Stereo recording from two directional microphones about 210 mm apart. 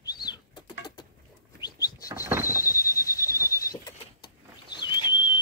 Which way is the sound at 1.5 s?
20° left (ahead or behind).